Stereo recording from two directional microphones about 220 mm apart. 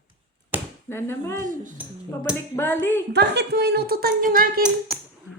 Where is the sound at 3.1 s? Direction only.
50° right (ahead or behind).